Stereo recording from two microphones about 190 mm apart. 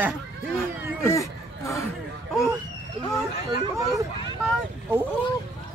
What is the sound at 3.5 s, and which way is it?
Speech, 20° right (ahead or behind).